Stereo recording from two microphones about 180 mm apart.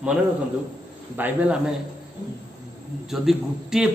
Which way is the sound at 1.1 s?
10° right (ahead or behind).